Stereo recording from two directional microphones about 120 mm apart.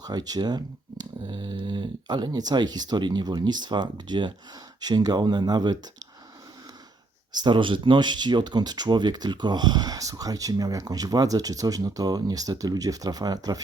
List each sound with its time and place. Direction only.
0.0 s speech: 35° right (ahead or behind)
7.3 s speech: 40° right (ahead or behind)